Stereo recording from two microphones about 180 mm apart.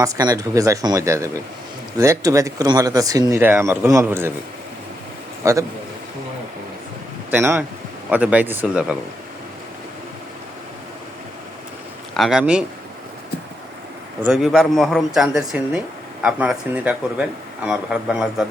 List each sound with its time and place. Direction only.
0.0 s speech: 20° right (ahead or behind)
5.5 s speech: 15° right (ahead or behind)
7.3 s speech: 10° right (ahead or behind)
12.1 s speech: centre (ahead or behind)
14.2 s speech: 5° right (ahead or behind)